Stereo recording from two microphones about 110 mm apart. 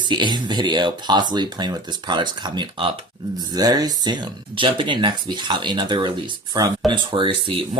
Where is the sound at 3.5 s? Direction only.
35° right (ahead or behind).